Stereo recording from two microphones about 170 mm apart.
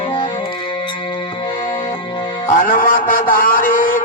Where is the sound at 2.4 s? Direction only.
55° left (ahead or behind).